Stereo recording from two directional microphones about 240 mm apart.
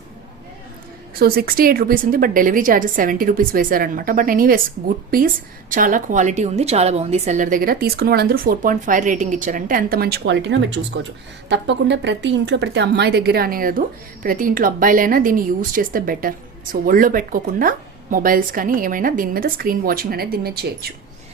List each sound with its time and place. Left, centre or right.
1.1 s a woman's voice: right